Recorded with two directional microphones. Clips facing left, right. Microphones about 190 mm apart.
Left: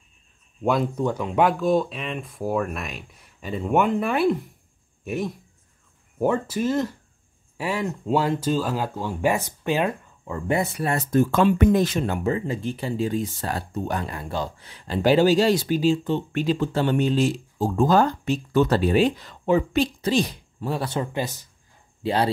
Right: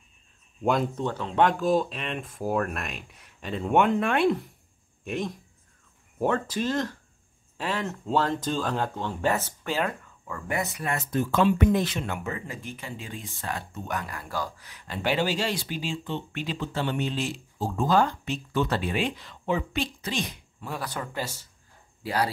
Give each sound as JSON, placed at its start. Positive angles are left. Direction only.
{"t": 0.7, "sound": "speech", "side_deg": 5}